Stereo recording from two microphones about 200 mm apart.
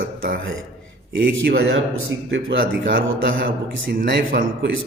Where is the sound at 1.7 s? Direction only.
75° right (ahead or behind).